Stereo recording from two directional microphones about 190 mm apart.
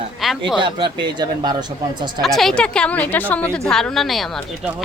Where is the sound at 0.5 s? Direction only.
25° right (ahead or behind).